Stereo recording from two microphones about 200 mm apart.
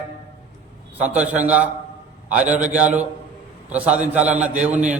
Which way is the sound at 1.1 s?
5° right (ahead or behind).